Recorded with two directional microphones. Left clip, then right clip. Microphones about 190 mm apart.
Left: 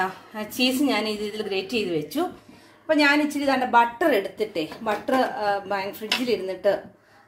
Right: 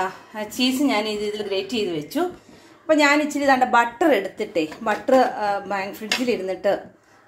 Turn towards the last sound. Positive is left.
turn(degrees=-15)  # may be behind; listen again after turning